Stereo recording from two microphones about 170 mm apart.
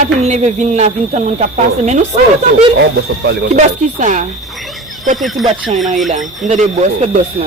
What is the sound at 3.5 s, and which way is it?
Speech, 45° right (ahead or behind).